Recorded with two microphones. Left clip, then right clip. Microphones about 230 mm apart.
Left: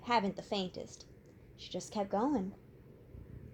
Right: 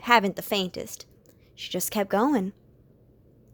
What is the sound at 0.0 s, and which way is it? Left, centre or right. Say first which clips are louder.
Speech: right 12 dB; right.